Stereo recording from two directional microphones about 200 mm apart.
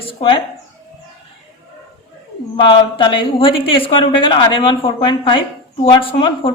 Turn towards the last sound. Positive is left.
turn(degrees=25)  # may be behind; listen again after turning